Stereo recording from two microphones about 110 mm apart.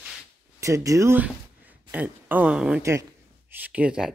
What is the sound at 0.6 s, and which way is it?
Speech, 30° right (ahead or behind).